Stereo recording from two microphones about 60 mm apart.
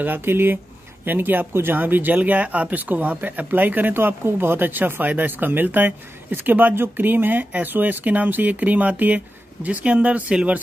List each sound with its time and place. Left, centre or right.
0.0 s speech: right